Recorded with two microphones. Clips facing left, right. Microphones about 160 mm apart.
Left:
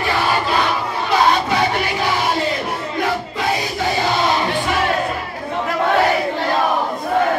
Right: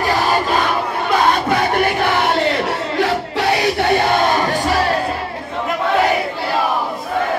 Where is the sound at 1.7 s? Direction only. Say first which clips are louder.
Right 4 dB; 55° right (ahead or behind).